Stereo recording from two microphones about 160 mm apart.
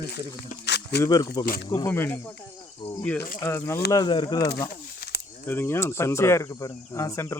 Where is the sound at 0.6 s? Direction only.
90° left.